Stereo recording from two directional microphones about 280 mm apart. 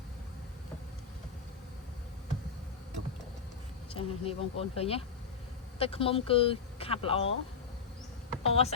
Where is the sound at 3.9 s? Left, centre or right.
Centre.